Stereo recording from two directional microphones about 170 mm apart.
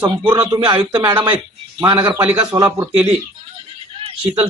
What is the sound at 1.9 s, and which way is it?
Speech, 25° right (ahead or behind).